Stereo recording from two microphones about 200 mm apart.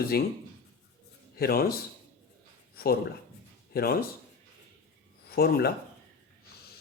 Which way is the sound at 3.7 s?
50° left (ahead or behind).